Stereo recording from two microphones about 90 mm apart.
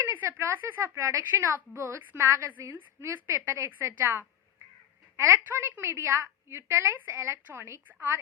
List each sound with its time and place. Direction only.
0.0 s a woman's voice: 25° right (ahead or behind)